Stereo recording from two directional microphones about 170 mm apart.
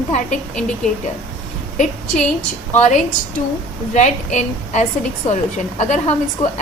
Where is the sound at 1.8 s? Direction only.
50° left (ahead or behind).